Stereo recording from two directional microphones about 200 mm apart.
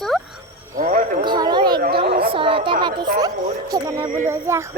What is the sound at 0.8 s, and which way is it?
Speech, 45° right (ahead or behind).